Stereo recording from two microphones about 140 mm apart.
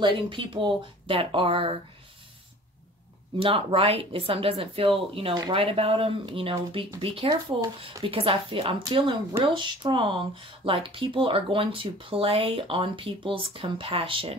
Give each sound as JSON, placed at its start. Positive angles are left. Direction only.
{"t": 0.0, "sound": "speech", "side_deg": -35}
{"t": 3.3, "sound": "speech", "side_deg": -40}